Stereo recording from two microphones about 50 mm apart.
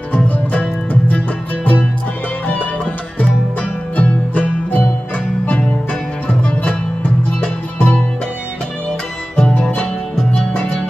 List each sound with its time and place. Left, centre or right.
0.1 s music: left
3.9 s music: left
6.2 s music: left
9.4 s music: centre